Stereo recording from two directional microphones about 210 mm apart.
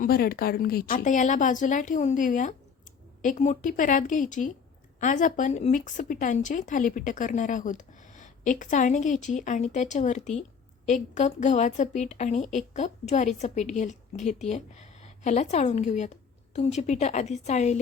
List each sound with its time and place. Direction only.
0.0 s speech: 45° left (ahead or behind)